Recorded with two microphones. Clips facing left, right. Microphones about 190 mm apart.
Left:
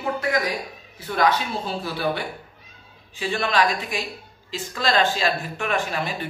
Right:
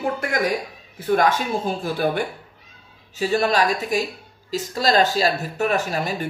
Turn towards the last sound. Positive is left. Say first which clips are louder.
# right 2 dB
turn(degrees=-40)  # may be behind; listen again after turning